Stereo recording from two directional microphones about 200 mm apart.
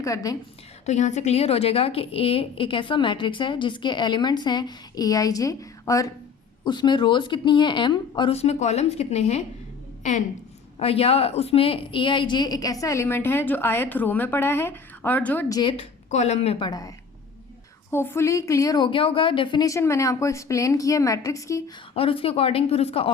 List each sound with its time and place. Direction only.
0.0 s a woman's voice: 15° left (ahead or behind)
0.9 s a woman's voice: 35° left (ahead or behind); by 15.7 s 15° left (ahead or behind)
15.7 s speech: 30° left (ahead or behind)
17.9 s a woman's voice: 10° left (ahead or behind)
21.9 s a woman's voice: 30° left (ahead or behind)